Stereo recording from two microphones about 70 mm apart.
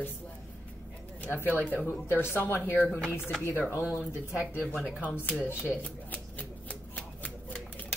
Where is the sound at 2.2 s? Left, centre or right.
Left.